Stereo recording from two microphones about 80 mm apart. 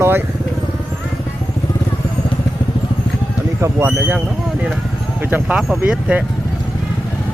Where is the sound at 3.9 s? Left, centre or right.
Right.